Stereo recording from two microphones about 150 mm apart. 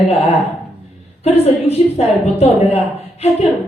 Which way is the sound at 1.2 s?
45° left (ahead or behind).